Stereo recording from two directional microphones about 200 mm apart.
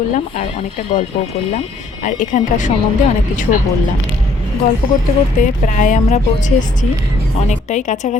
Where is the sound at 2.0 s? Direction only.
40° left (ahead or behind).